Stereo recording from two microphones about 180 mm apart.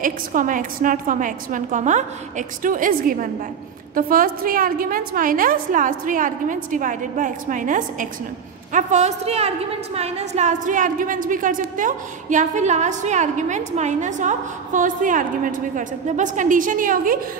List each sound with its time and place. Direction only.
0.0 s a woman's voice: 50° right (ahead or behind)